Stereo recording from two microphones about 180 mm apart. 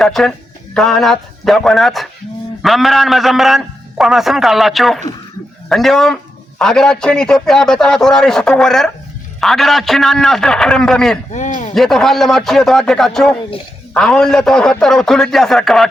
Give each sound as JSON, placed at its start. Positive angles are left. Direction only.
{"t": 0.0, "sound": "a man's voice", "side_deg": 0}
{"t": 11.3, "sound": "speech", "side_deg": 40}
{"t": 11.7, "sound": "a man's voice", "side_deg": 0}